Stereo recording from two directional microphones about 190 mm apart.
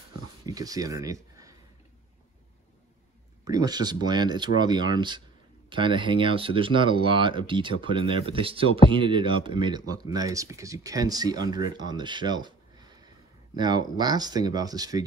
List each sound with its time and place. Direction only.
0.5 s speech: 20° right (ahead or behind)
3.4 s speech: 20° right (ahead or behind)